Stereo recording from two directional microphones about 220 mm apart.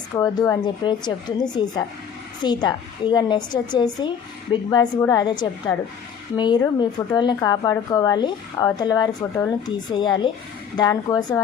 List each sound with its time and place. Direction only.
0.2 s a woman's voice: 15° left (ahead or behind)